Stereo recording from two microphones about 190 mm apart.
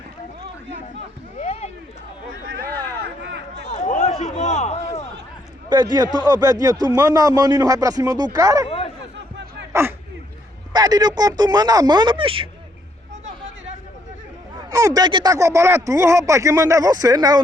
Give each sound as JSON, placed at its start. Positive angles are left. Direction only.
{"t": 1.4, "sound": "a sound", "side_deg": 35}
{"t": 3.3, "sound": "a sound", "side_deg": -65}
{"t": 3.7, "sound": "run", "side_deg": 40}
{"t": 5.6, "sound": "a man's voice", "side_deg": -20}
{"t": 10.7, "sound": "speech", "side_deg": -20}
{"t": 14.7, "sound": "speech", "side_deg": -20}